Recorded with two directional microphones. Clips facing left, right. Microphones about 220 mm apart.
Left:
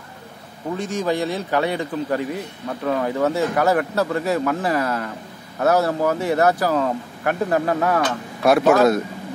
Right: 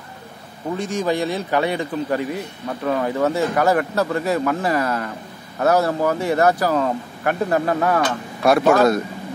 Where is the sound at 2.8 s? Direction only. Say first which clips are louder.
Right 1 dB; centre (ahead or behind).